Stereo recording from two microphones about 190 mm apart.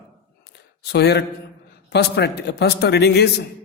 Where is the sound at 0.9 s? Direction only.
60° left (ahead or behind).